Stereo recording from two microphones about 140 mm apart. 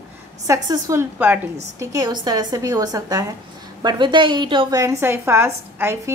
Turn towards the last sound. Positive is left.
turn(degrees=-15)  # may be behind; listen again after turning